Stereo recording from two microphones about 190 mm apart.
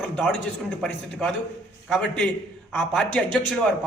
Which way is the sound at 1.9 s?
5° left (ahead or behind).